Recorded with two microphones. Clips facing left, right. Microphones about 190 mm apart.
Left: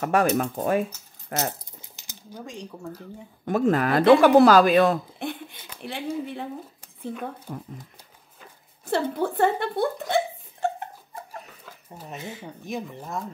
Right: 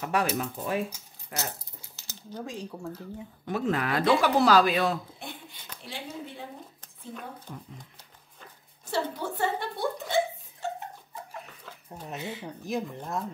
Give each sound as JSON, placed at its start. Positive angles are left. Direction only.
{"t": 0.0, "sound": "speech", "side_deg": 50}
{"t": 1.8, "sound": "dog", "side_deg": 15}
{"t": 3.4, "sound": "speech", "side_deg": 45}
{"t": 7.5, "sound": "speech", "side_deg": 45}
{"t": 8.9, "sound": "speech", "side_deg": 55}
{"t": 11.6, "sound": "speech", "side_deg": 5}